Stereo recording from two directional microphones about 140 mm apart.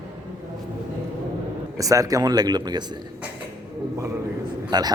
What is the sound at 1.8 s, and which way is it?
Mantra, 25° right (ahead or behind).